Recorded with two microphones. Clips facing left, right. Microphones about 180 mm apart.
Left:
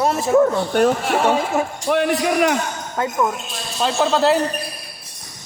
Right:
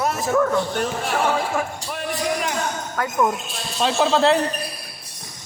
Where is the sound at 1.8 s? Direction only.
70° left (ahead or behind).